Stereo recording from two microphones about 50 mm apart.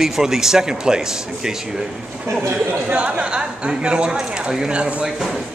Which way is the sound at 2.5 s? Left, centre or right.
Right.